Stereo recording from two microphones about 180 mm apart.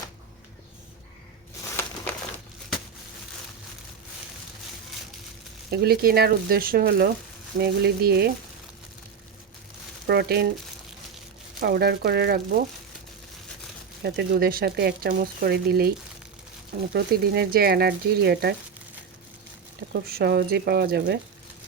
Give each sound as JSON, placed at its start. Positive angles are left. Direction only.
{"t": 5.7, "sound": "speech", "side_deg": -60}
{"t": 10.1, "sound": "speech", "side_deg": -65}
{"t": 11.6, "sound": "speech", "side_deg": -60}
{"t": 14.0, "sound": "speech", "side_deg": -60}
{"t": 16.9, "sound": "speech", "side_deg": -65}
{"t": 19.9, "sound": "speech", "side_deg": -60}